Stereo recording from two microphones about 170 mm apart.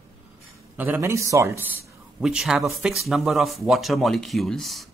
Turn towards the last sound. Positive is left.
turn(degrees=0)  # may be behind; listen again after turning